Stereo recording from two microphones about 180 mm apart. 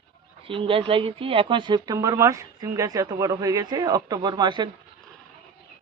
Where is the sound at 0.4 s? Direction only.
30° right (ahead or behind).